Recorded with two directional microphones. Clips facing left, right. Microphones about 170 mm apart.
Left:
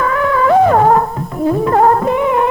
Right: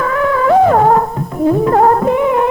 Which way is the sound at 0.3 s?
20° right (ahead or behind).